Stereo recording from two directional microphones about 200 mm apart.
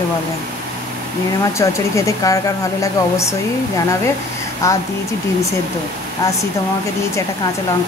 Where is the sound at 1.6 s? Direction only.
15° left (ahead or behind).